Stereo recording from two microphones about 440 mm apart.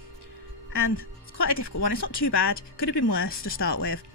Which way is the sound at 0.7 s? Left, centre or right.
Left.